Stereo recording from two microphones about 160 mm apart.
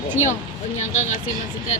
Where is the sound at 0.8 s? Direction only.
50° left (ahead or behind).